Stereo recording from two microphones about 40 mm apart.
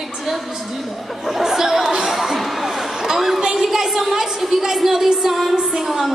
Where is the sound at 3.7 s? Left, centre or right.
Centre.